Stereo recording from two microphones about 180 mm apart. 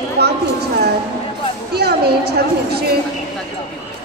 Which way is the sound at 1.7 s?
65° right (ahead or behind).